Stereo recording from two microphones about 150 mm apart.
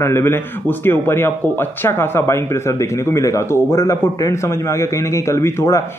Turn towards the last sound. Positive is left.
turn(degrees=20)  # may be behind; listen again after turning